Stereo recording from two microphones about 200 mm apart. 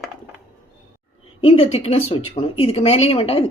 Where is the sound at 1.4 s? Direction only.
30° left (ahead or behind).